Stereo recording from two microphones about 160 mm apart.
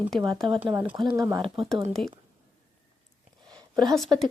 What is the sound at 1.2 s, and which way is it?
Speech, 20° right (ahead or behind).